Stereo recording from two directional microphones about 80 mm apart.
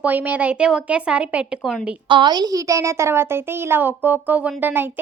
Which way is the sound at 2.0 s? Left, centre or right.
Right.